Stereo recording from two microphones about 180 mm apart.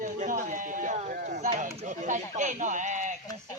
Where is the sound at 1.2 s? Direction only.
55° right (ahead or behind).